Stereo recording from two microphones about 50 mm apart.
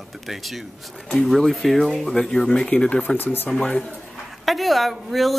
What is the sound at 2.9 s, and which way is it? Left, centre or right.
Speech, left.